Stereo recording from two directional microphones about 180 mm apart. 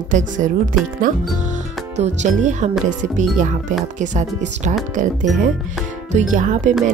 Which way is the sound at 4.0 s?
45° right (ahead or behind).